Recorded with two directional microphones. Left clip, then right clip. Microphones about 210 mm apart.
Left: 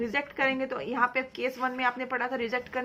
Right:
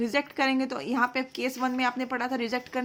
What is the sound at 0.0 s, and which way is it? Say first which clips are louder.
A woman's voice: right 1 dB; 50° right (ahead or behind).